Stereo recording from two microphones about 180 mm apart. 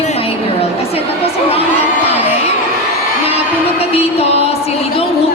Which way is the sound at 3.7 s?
35° left (ahead or behind).